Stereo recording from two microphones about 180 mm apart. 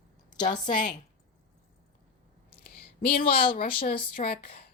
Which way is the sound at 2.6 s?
55° left (ahead or behind).